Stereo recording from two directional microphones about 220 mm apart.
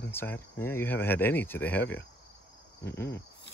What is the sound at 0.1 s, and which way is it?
Speech, 10° left (ahead or behind).